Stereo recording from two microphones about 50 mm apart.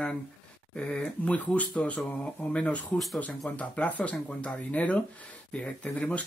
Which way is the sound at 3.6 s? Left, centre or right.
Left.